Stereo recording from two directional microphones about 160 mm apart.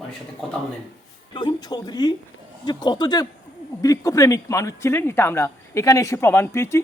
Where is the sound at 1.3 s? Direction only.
25° left (ahead or behind).